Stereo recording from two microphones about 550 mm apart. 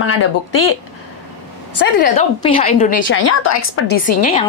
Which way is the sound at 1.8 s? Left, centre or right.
Centre.